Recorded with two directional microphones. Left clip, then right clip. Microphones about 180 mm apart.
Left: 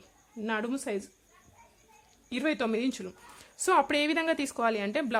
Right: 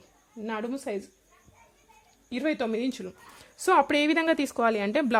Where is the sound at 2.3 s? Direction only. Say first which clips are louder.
Right 1 dB; centre (ahead or behind).